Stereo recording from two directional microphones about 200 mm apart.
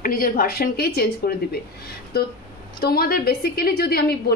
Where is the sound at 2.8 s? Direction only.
50° left (ahead or behind).